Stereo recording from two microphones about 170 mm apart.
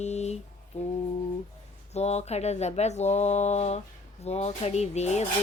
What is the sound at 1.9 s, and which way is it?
Mantra, 40° left (ahead or behind).